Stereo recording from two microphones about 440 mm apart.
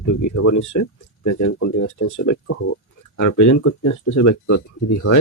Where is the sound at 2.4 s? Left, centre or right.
Left.